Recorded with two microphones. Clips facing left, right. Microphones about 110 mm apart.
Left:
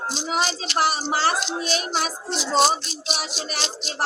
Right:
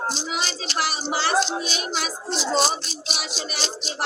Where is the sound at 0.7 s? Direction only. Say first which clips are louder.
Left 3 dB; 45° left (ahead or behind).